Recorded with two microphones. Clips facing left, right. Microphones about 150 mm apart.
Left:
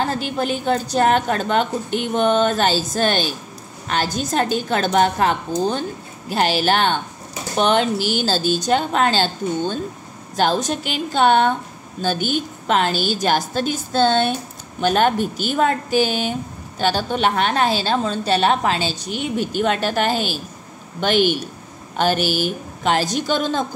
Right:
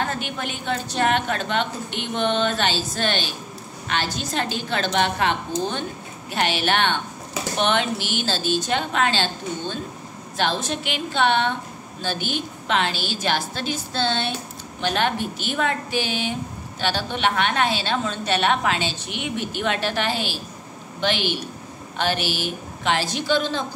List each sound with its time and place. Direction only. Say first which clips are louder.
0.0 s a woman's voice: left 5 dB; 35° left (ahead or behind)